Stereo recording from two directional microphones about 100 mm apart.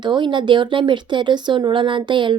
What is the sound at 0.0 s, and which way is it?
A woman's voice, 50° right (ahead or behind).